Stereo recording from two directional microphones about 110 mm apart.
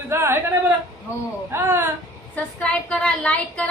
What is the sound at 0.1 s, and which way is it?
Speech, 25° right (ahead or behind).